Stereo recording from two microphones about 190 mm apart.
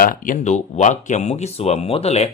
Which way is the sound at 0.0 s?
45° left (ahead or behind).